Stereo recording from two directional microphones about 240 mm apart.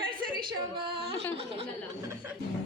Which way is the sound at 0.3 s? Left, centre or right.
Centre.